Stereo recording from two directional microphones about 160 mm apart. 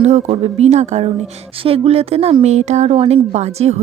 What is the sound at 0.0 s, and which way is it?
A woman's voice, 45° right (ahead or behind).